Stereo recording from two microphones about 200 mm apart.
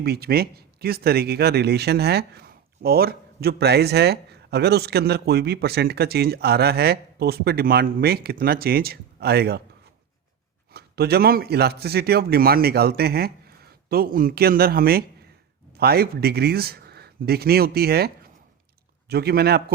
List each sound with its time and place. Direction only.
0.0 s speech: 50° right (ahead or behind)
10.8 s speech: 50° right (ahead or behind)